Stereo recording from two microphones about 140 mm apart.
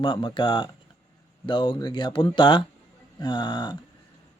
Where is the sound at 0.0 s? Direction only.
35° left (ahead or behind).